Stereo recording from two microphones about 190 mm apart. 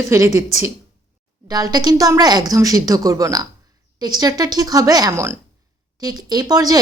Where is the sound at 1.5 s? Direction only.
20° right (ahead or behind).